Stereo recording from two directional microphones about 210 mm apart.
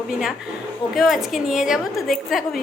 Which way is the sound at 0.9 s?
Centre (ahead or behind).